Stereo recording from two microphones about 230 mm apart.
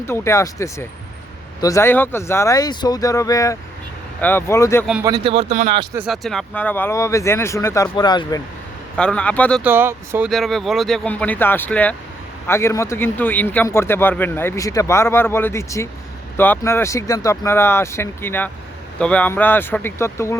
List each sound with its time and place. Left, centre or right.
0.0 s speech: centre
5.0 s speech: centre
5.9 s speech: centre
9.0 s speech: centre
9.6 s speech: centre